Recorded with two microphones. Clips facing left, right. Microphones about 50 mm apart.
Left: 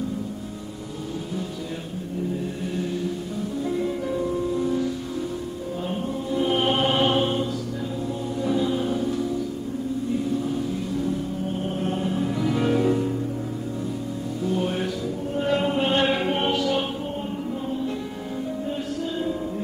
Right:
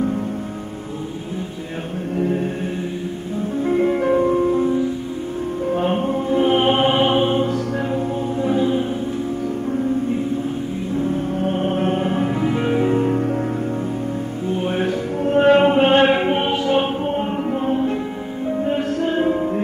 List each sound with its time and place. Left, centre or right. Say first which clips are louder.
2.1 s chant: right 8 dB; right
3.6 s music: right 10 dB; right
5.7 s music: right 10 dB; right
11.4 s music: right 10 dB; right
14.5 s music: right 5 dB; right
15.2 s music: right 11 dB; right
17.6 s music: right 8 dB; right